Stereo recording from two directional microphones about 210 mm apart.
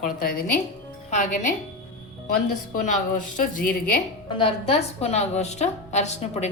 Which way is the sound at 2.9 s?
40° left (ahead or behind).